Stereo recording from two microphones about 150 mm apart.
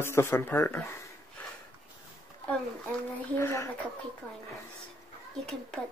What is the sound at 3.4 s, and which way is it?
Speech, 20° left (ahead or behind).